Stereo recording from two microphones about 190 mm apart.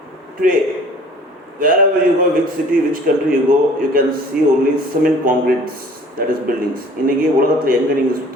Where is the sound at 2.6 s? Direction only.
45° right (ahead or behind).